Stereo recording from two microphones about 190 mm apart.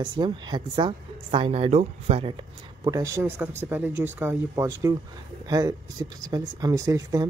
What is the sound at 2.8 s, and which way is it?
Speech, 15° right (ahead or behind).